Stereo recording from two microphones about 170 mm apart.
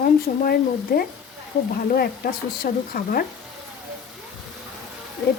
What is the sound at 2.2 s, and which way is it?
Speech, 60° left (ahead or behind).